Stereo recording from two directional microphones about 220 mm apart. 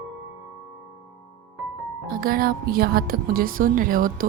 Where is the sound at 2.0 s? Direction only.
40° right (ahead or behind).